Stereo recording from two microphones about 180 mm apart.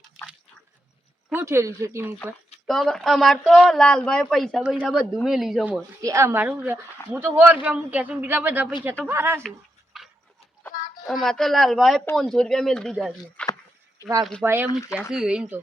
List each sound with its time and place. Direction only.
1.3 s a man's voice: 10° right (ahead or behind)
2.6 s speech: centre (ahead or behind)
6.0 s a man's voice: 15° right (ahead or behind)
7.0 s speech: 15° left (ahead or behind)
7.3 s a man's voice: 10° right (ahead or behind)
9.9 s a sound: centre (ahead or behind)
11.0 s speech: centre (ahead or behind)
13.4 s a sound: 5° left (ahead or behind)
14.0 s speech: 15° left (ahead or behind)
14.4 s a man's voice: 10° right (ahead or behind)